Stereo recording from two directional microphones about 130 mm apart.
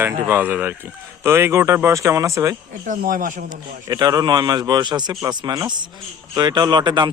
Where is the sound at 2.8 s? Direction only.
90° right.